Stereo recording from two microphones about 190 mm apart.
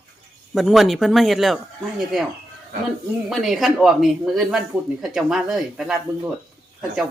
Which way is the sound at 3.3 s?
Centre (ahead or behind).